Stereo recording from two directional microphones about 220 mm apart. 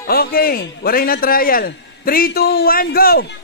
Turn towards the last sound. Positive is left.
turn(degrees=45)  # may be behind; listen again after turning